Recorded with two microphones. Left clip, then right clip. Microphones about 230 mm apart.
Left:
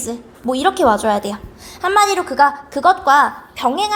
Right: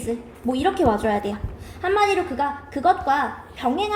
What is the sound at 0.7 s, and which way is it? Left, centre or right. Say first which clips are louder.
A woman's voice: left 6 dB; left.